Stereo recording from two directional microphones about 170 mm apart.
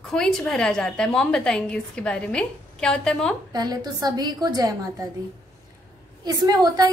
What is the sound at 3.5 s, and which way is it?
A woman's voice, 25° right (ahead or behind).